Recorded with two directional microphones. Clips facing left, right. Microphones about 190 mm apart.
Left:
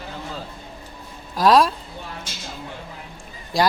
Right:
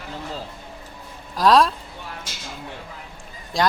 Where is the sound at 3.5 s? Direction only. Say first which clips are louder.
Left 1 dB; 5° left (ahead or behind).